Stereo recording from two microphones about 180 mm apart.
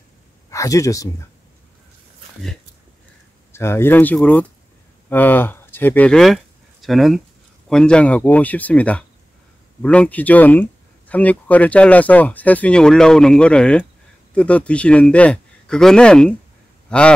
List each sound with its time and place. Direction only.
0.5 s speech: 20° left (ahead or behind)
3.5 s speech: 15° left (ahead or behind)